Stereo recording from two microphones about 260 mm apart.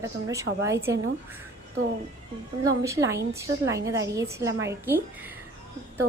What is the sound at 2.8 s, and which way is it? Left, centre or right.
A woman's voice, centre.